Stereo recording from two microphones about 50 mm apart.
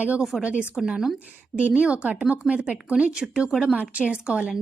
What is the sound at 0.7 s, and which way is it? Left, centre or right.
Speech, centre.